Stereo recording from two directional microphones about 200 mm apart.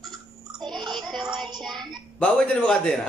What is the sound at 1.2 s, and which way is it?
Music, centre (ahead or behind).